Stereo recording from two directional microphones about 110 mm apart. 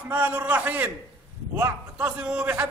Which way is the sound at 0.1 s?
15° right (ahead or behind).